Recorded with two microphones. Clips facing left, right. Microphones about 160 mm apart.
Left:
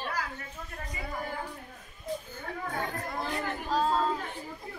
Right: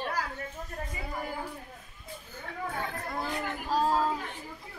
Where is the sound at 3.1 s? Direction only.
Centre (ahead or behind).